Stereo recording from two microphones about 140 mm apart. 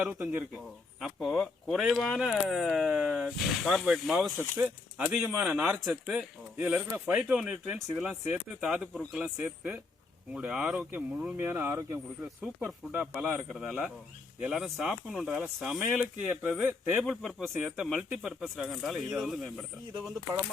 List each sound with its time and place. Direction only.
0.0 s speech: 10° right (ahead or behind)
1.0 s speech: centre (ahead or behind)
4.4 s speech: 15° right (ahead or behind)
5.5 s speech: 5° right (ahead or behind); by 11.9 s 20° right (ahead or behind)
12.2 s speech: 10° right (ahead or behind)
13.3 s speech: centre (ahead or behind)